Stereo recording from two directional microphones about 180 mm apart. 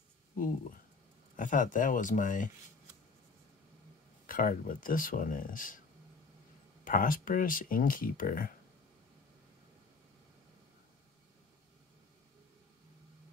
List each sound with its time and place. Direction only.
1.3 s speech: 45° left (ahead or behind)
4.3 s speech: 50° left (ahead or behind)
6.8 s speech: 50° left (ahead or behind)